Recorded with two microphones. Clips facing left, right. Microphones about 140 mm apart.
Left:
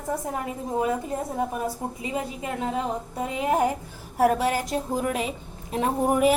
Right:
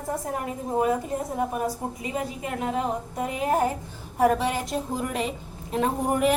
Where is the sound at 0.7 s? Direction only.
30° right (ahead or behind).